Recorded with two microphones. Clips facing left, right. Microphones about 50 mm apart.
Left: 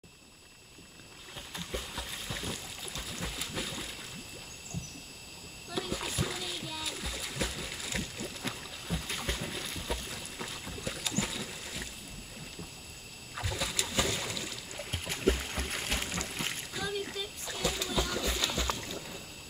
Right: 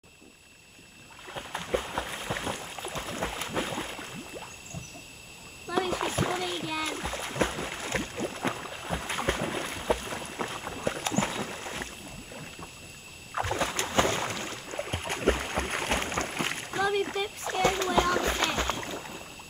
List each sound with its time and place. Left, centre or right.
1.3 s boat: right
5.8 s splash: right
6.4 s rowboat: right
7.0 s boat: right
13.3 s a sound: right
17.1 s splash: right
18.9 s boat: right